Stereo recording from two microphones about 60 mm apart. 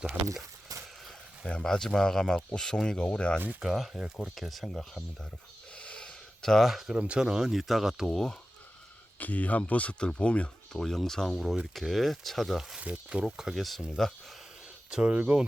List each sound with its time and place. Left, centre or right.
1.5 s speech: centre
3.6 s speech: centre
5.7 s a sound: centre
7.0 s speech: centre
9.1 s speech: left
10.8 s speech: centre
12.7 s speech: centre
13.2 s speech: centre
14.8 s speech: centre